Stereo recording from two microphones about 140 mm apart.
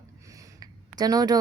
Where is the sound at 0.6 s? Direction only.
25° right (ahead or behind).